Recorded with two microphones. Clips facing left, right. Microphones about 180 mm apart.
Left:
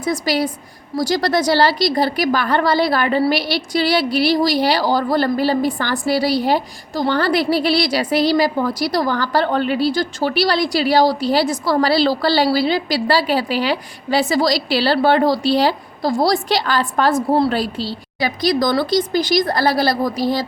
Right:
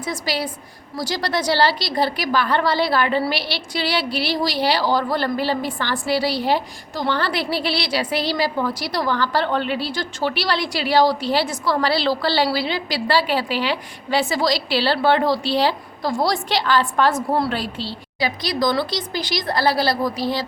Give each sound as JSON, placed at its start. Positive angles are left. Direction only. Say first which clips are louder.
{"t": 0.0, "sound": "a woman's voice", "louder": "left 6 dB", "side_deg": 45}